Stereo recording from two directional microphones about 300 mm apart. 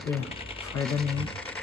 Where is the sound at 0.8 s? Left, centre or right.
Centre.